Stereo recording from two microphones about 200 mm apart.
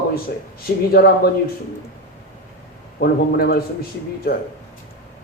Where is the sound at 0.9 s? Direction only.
50° left (ahead or behind).